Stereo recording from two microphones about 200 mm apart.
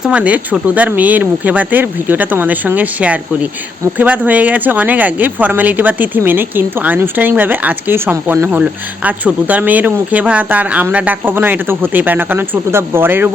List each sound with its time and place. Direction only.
0.0 s speech: 5° right (ahead or behind)